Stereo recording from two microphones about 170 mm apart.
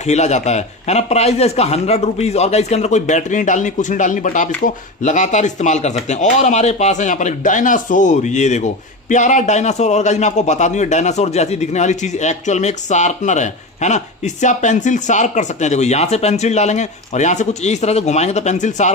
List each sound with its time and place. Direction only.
0.0 s a man's voice: 40° left (ahead or behind)